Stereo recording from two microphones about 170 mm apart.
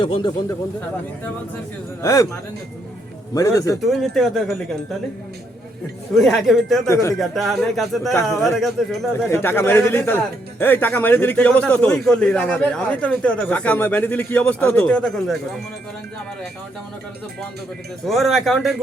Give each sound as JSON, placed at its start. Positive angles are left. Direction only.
{"t": 0.0, "sound": "speech", "side_deg": 30}
{"t": 2.0, "sound": "speech", "side_deg": 20}
{"t": 3.8, "sound": "speech", "side_deg": 0}
{"t": 6.1, "sound": "speech", "side_deg": 0}
{"t": 6.8, "sound": "speech", "side_deg": 20}
{"t": 7.2, "sound": "speech", "side_deg": 0}
{"t": 9.3, "sound": "speech", "side_deg": 15}
{"t": 18.1, "sound": "speech", "side_deg": 0}